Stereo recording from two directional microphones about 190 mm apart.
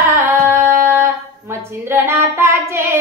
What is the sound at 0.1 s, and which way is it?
Singing, 15° right (ahead or behind).